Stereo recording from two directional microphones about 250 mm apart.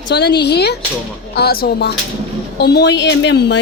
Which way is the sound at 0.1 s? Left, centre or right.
Left.